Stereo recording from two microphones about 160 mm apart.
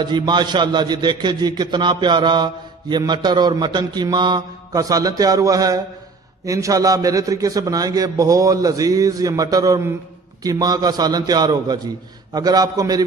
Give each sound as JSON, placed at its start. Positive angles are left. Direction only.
{"t": 0.0, "sound": "a man's voice", "side_deg": -30}